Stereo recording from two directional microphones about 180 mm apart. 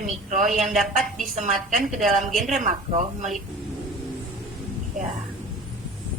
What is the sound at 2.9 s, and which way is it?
Speech, 40° right (ahead or behind).